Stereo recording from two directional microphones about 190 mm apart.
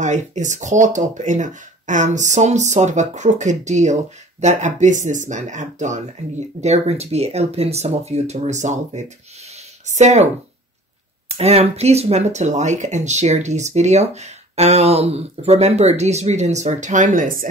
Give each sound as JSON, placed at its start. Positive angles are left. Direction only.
{"t": 0.0, "sound": "speech", "side_deg": -40}
{"t": 11.3, "sound": "speech", "side_deg": -35}